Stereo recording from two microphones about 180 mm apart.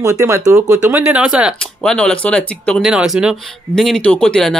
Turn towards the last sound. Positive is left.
turn(degrees=5)  # may be behind; listen again after turning